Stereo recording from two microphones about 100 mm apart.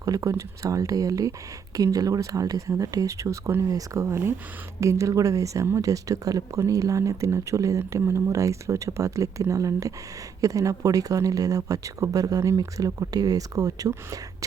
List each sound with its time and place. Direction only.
0.0 s speech: 35° right (ahead or behind)